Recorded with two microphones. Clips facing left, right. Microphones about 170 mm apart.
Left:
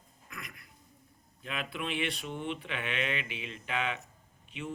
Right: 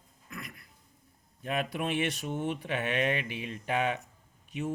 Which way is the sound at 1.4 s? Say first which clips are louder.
Right 5 dB; 45° right (ahead or behind).